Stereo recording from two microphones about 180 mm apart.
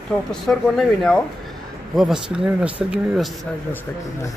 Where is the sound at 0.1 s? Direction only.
Centre (ahead or behind).